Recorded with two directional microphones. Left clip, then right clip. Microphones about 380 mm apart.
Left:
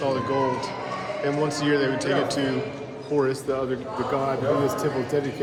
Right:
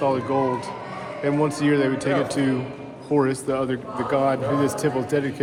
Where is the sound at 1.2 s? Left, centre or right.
Centre.